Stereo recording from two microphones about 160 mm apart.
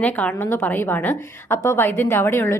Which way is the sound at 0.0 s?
10° left (ahead or behind).